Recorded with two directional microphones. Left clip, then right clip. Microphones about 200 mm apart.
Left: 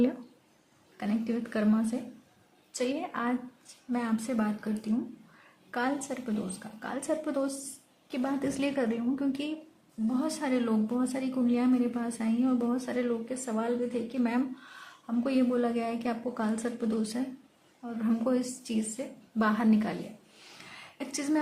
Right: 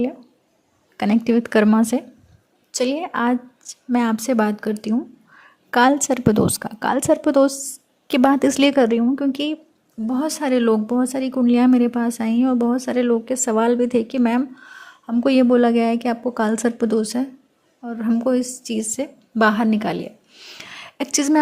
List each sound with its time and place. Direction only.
0.9 s a woman's voice: 50° right (ahead or behind)
8.0 s a woman's voice: 55° right (ahead or behind)
20.7 s a sound: 45° right (ahead or behind)